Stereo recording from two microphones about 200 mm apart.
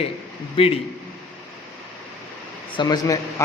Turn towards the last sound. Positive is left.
turn(degrees=20)  # may be behind; listen again after turning